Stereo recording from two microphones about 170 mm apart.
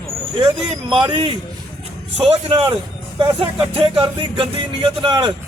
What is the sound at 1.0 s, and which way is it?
A man's voice, 30° right (ahead or behind).